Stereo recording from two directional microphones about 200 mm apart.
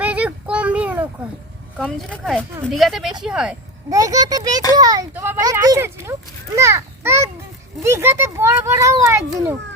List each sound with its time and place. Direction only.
0.0 s a sound: 5° right (ahead or behind)
1.8 s a woman's voice: 5° left (ahead or behind)
3.8 s a child's voice: 15° right (ahead or behind)